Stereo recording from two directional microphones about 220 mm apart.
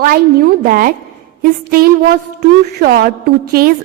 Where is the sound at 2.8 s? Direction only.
45° right (ahead or behind).